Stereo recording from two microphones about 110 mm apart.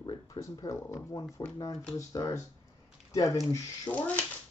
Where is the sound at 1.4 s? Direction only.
40° left (ahead or behind).